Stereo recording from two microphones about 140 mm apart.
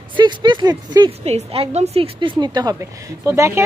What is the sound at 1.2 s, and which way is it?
A woman's voice, 45° right (ahead or behind).